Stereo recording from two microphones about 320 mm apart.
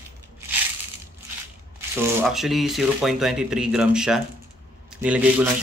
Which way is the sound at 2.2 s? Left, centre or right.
Centre.